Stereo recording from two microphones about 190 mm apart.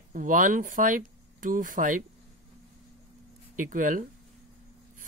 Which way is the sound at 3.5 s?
45° right (ahead or behind).